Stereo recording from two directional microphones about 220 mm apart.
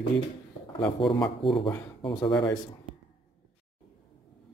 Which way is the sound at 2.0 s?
25° left (ahead or behind).